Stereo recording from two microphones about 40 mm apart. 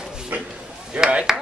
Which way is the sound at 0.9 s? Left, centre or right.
Right.